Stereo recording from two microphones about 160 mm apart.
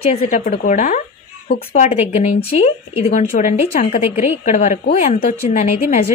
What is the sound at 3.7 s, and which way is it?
Speech, 65° left (ahead or behind).